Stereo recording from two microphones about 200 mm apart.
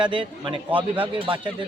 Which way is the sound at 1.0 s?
25° right (ahead or behind).